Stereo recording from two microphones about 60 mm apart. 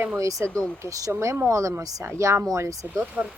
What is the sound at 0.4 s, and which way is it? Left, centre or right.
Speech, centre.